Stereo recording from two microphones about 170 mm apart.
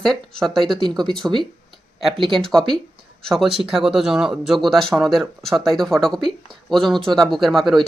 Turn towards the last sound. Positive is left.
turn(degrees=0)  # may be behind; listen again after turning